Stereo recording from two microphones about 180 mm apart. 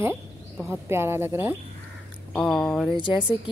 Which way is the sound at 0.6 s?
10° right (ahead or behind).